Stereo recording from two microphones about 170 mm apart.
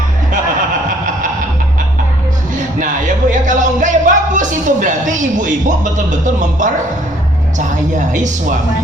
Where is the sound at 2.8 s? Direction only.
50° right (ahead or behind).